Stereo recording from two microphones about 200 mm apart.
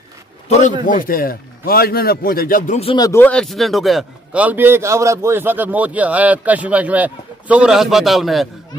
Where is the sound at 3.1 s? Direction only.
10° left (ahead or behind).